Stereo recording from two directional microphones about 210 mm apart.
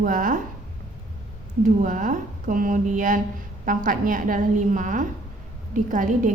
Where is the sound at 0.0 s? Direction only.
40° right (ahead or behind).